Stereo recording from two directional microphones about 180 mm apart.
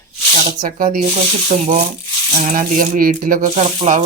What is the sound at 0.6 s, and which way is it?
Speech, 50° right (ahead or behind).